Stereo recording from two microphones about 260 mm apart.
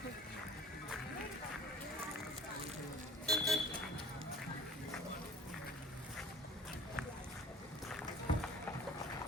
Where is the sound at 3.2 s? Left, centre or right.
Centre.